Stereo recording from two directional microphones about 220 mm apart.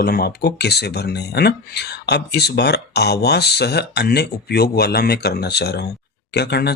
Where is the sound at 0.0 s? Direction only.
45° left (ahead or behind).